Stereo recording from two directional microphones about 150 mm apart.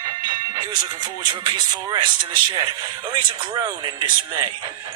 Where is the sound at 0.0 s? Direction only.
30° right (ahead or behind).